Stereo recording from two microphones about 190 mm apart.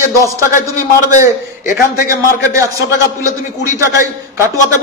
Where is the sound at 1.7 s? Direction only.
50° left (ahead or behind).